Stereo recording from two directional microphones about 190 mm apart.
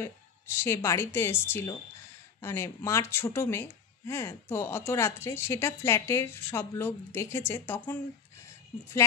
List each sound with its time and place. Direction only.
0.0 s speech: 15° left (ahead or behind)